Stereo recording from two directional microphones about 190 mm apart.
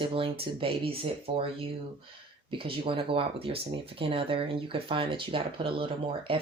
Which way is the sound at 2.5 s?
25° right (ahead or behind).